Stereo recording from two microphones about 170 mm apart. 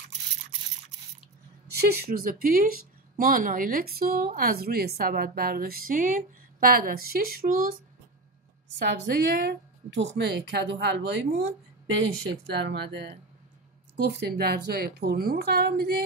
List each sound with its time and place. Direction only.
1.7 s speech: 60° right (ahead or behind)
8.7 s a woman's voice: 70° right (ahead or behind); by 11.1 s 90° right
12.5 s a woman's voice: 80° right